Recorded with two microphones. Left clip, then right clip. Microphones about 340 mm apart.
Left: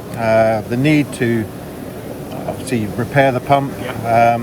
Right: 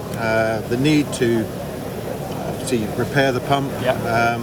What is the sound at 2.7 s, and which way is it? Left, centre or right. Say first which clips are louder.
Speech: left 3 dB; centre.